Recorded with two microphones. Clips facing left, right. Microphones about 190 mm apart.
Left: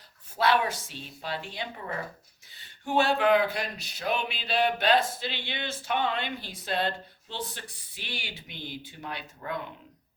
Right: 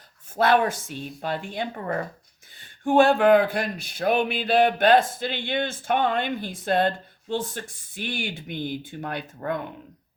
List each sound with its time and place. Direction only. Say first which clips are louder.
0.3 s speech: right 5 dB; 50° right (ahead or behind)